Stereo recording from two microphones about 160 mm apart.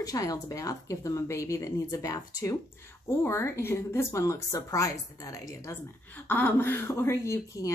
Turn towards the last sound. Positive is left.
turn(degrees=20)  # may be behind; listen again after turning